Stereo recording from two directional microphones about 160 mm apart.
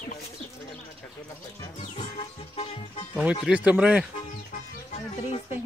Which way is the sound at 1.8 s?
35° left (ahead or behind).